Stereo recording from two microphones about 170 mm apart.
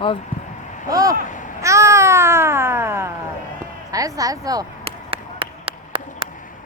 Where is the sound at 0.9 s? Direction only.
20° right (ahead or behind).